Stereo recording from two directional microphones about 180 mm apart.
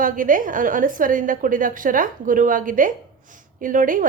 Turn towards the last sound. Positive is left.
turn(degrees=-50)  # may be behind; listen again after turning